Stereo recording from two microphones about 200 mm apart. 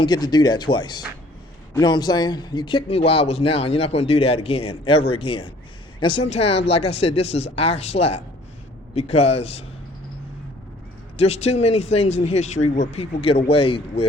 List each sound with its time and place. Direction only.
0.0 s a man's voice: 20° left (ahead or behind)
11.2 s speech: 30° left (ahead or behind)